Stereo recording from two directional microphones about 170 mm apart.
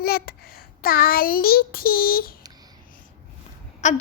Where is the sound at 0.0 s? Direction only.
65° left (ahead or behind).